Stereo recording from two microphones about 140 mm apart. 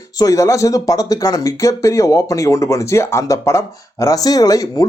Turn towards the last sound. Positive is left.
turn(degrees=25)  # may be behind; listen again after turning